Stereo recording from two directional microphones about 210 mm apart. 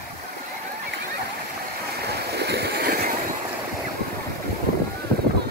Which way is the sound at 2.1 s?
50° right (ahead or behind).